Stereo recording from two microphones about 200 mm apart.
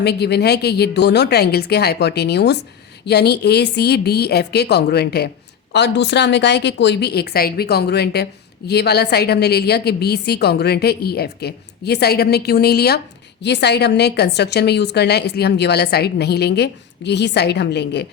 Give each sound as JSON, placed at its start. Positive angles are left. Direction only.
{"t": 0.0, "sound": "a woman's voice", "side_deg": 55}